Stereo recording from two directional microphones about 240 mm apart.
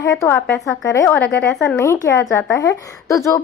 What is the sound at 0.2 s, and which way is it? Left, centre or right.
A woman's voice, centre.